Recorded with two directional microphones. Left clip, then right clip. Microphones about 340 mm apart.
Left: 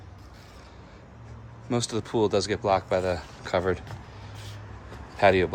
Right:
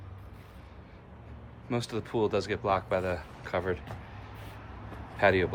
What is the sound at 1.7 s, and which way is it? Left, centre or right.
Speech, centre.